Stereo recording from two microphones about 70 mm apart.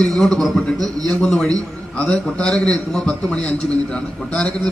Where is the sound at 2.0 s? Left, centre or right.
Centre.